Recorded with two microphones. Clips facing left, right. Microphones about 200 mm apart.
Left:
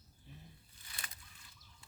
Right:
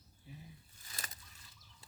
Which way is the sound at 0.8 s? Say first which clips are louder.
Right 1 dB; 40° right (ahead or behind).